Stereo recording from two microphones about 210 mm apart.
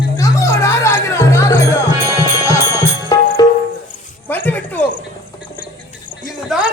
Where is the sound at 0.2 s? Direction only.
15° left (ahead or behind).